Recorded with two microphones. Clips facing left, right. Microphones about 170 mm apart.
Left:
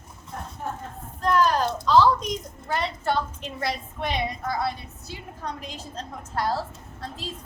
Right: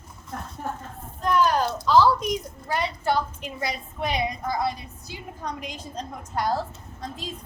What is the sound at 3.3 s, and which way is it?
Speech, 10° right (ahead or behind).